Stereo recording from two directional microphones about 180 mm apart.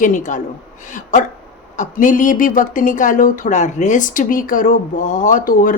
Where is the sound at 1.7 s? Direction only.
45° left (ahead or behind).